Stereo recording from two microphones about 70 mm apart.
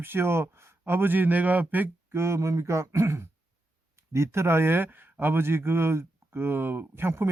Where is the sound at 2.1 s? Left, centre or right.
Right.